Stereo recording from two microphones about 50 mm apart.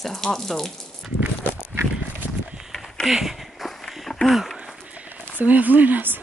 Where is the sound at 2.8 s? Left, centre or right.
Centre.